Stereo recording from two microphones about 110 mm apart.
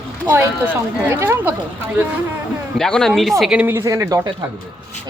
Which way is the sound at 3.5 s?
15° right (ahead or behind).